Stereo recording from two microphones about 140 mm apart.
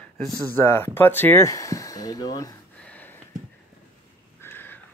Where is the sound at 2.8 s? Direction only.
10° left (ahead or behind).